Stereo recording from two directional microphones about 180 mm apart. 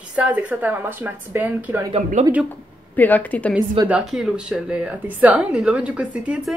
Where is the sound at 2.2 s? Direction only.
40° right (ahead or behind).